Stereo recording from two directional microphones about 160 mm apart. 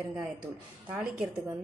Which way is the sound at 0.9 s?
5° right (ahead or behind).